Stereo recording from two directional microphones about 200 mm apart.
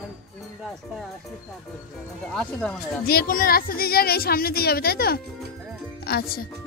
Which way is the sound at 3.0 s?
45° left (ahead or behind).